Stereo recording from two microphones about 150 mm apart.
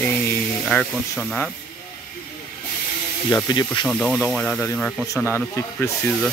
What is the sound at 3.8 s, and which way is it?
Speech, 5° left (ahead or behind).